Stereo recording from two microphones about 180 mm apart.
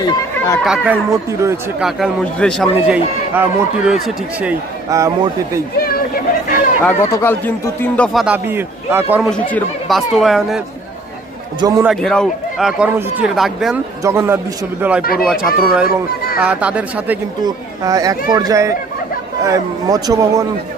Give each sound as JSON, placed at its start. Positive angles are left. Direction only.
{"t": 0.0, "sound": "speech", "side_deg": 20}
{"t": 0.6, "sound": "speech", "side_deg": -5}
{"t": 1.1, "sound": "speech", "side_deg": -15}
{"t": 1.8, "sound": "speech", "side_deg": 0}
{"t": 4.9, "sound": "speech", "side_deg": -20}
{"t": 6.8, "sound": "speech", "side_deg": 15}
{"t": 9.3, "sound": "speech", "side_deg": 5}
{"t": 11.8, "sound": "speech", "side_deg": 0}
{"t": 14.0, "sound": "speech", "side_deg": -15}
{"t": 17.4, "sound": "speech", "side_deg": -20}